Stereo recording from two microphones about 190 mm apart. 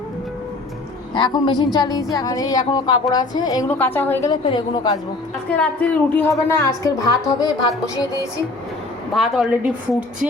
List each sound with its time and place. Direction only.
1.1 s a woman's voice: 25° left (ahead or behind)
4.3 s a woman's voice: 25° left (ahead or behind)
5.5 s a woman's voice: 10° left (ahead or behind)
9.1 s a woman's voice: centre (ahead or behind)